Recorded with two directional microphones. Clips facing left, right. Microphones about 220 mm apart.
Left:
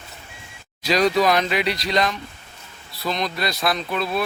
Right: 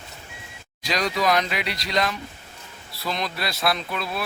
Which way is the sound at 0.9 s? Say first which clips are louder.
Left 5 dB; 25° left (ahead or behind).